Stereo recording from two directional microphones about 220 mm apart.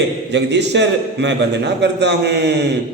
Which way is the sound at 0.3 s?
50° right (ahead or behind).